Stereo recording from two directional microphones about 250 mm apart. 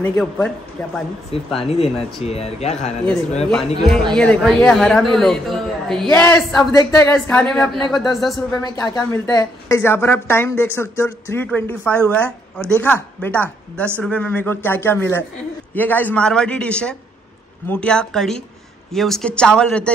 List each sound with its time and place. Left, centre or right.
0.0 s speech: centre
1.3 s speech: left
3.8 s speech: centre
8.5 s speech: centre